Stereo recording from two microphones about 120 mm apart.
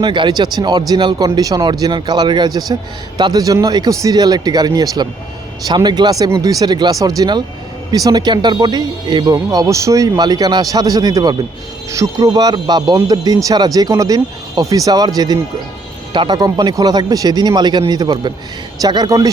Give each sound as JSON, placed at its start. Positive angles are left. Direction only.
{"t": 0.0, "sound": "speech", "side_deg": -40}